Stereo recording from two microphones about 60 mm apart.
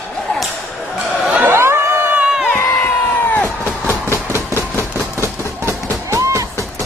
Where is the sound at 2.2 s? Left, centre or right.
Centre.